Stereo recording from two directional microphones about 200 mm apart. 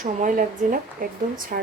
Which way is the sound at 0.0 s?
40° right (ahead or behind).